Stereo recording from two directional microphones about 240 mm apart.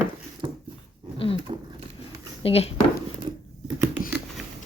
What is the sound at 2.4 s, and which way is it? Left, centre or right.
Speech, left.